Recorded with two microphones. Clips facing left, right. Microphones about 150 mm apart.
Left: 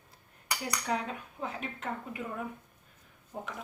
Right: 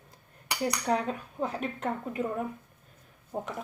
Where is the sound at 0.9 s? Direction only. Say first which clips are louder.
Right 2 dB; 40° right (ahead or behind).